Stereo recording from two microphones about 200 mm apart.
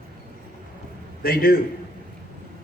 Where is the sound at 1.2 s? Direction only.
50° left (ahead or behind).